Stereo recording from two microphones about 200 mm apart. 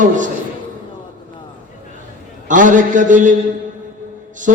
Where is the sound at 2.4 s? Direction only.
40° right (ahead or behind).